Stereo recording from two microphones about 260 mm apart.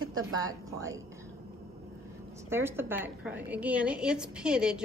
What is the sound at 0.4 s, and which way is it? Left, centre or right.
Speech, centre.